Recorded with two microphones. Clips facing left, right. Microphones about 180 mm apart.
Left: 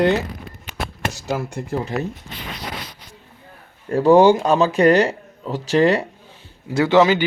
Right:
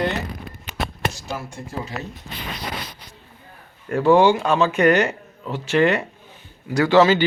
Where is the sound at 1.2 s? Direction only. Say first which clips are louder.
Left 7 dB; 70° left (ahead or behind).